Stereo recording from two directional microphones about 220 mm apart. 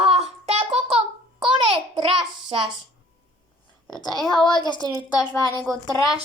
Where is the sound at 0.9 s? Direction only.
25° right (ahead or behind).